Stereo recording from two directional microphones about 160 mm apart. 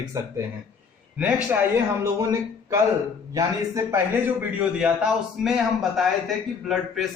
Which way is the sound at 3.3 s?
20° right (ahead or behind).